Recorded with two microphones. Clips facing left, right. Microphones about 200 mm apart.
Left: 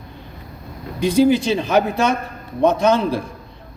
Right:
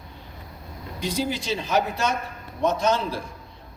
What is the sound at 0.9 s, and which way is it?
A man's voice, 55° left (ahead or behind).